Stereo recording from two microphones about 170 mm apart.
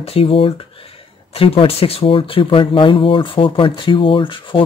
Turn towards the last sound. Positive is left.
turn(degrees=30)  # may be behind; listen again after turning